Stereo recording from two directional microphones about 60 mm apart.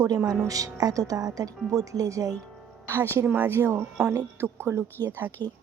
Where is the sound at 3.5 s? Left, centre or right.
Right.